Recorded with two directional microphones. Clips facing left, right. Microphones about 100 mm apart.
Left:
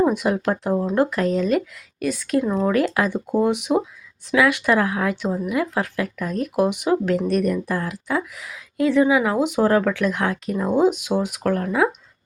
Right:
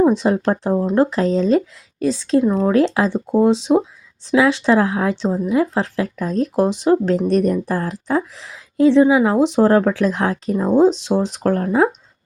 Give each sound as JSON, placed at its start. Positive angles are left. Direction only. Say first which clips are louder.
{"t": 0.1, "sound": "a woman's voice", "louder": "right 4 dB", "side_deg": -25}